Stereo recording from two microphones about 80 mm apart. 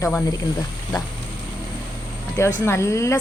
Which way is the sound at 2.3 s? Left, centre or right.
Left.